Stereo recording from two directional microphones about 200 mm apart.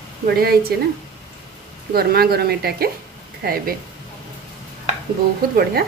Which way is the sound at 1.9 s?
50° right (ahead or behind).